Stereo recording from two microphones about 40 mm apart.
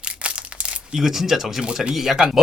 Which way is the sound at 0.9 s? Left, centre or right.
Centre.